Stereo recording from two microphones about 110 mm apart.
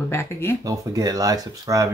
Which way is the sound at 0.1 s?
25° left (ahead or behind).